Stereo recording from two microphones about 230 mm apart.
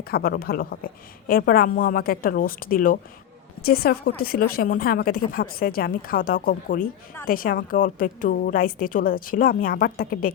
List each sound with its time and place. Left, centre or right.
0.0 s a woman's voice: left